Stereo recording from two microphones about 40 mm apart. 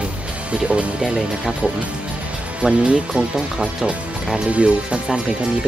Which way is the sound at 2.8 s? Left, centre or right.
Right.